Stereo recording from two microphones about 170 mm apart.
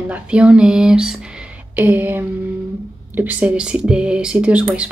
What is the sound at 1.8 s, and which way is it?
Speech, 10° right (ahead or behind).